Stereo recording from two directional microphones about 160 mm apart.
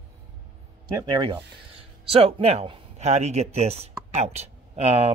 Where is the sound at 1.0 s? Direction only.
30° right (ahead or behind).